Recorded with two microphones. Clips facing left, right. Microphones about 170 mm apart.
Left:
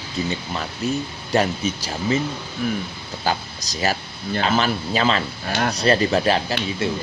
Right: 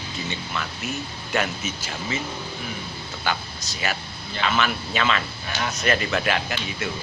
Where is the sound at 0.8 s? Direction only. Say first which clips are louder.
Left 7 dB; 35° left (ahead or behind).